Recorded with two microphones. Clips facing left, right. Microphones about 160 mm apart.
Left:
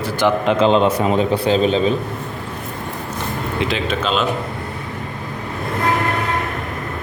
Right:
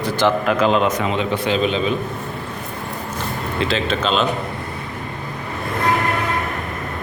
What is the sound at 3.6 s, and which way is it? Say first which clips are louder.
Speech: right 1 dB; 15° left (ahead or behind).